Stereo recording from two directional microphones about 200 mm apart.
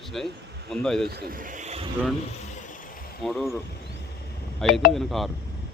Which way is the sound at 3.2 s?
Centre (ahead or behind).